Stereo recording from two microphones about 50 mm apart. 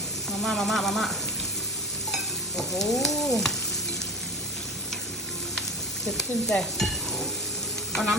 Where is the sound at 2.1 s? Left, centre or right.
Centre.